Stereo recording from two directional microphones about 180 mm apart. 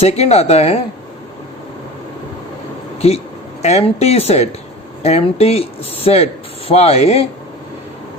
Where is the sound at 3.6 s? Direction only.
35° left (ahead or behind).